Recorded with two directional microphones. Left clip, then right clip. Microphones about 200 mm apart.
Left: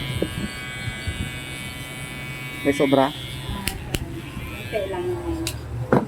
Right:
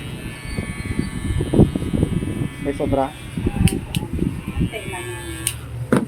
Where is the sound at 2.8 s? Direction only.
15° left (ahead or behind).